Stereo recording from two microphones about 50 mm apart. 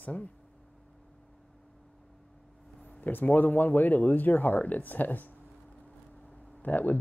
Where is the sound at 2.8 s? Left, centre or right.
Left.